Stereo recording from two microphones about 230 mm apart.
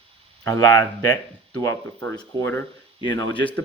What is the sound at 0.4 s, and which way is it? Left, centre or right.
A man's voice, centre.